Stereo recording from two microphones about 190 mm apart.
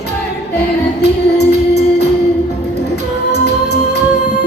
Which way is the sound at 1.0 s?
60° left (ahead or behind).